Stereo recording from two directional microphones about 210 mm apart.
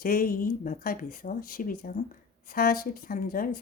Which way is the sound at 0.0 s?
45° left (ahead or behind).